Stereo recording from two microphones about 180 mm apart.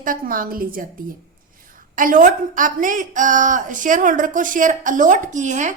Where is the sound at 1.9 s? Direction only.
50° right (ahead or behind).